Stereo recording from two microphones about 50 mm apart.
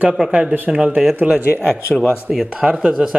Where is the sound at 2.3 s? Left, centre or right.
Centre.